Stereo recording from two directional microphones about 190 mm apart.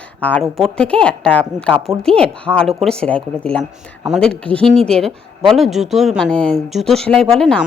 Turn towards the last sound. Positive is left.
turn(degrees=5)  # may be behind; listen again after turning